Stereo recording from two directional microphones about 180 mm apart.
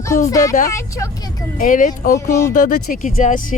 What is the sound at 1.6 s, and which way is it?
Speech, 45° left (ahead or behind).